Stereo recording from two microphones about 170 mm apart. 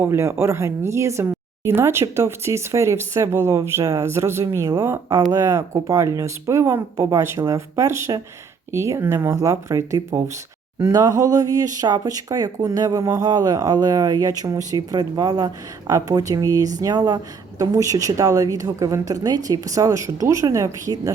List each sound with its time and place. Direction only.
0.0 s a woman's voice: 15° right (ahead or behind)